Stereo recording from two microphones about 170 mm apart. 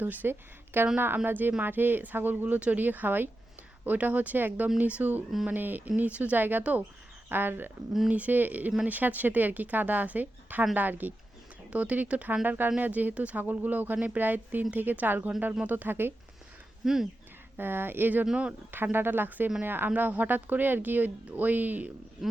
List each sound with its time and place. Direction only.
0.0 s speech: 10° right (ahead or behind)